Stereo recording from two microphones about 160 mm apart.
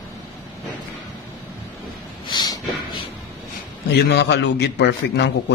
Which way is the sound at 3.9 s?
90° left.